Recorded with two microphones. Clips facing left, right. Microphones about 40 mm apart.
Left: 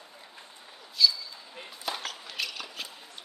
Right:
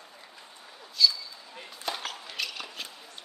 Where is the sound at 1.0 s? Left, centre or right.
Centre.